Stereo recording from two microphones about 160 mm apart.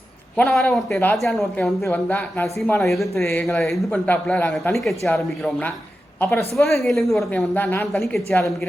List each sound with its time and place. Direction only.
0.3 s a woman's voice: 5° left (ahead or behind)
6.6 s speech: centre (ahead or behind)
7.5 s speech: 10° left (ahead or behind)